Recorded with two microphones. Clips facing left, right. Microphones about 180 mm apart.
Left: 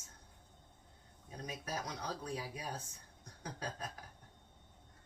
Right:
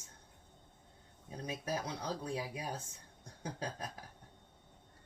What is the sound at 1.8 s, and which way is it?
Speech, 25° right (ahead or behind).